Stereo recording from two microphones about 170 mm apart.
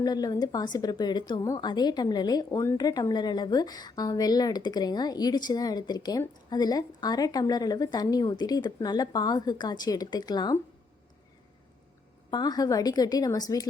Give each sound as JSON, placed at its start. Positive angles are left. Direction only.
{"t": 0.0, "sound": "a woman's voice", "side_deg": 25}
{"t": 12.3, "sound": "a woman's voice", "side_deg": 25}